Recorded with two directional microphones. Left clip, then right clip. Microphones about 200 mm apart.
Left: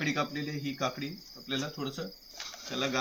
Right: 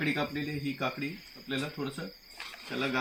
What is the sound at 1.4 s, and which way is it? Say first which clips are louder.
Speech: even; 20° left (ahead or behind).